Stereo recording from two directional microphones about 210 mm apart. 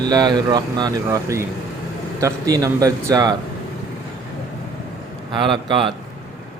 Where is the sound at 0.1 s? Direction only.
20° right (ahead or behind).